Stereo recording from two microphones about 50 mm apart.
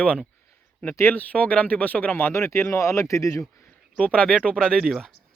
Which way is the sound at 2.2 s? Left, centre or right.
Left.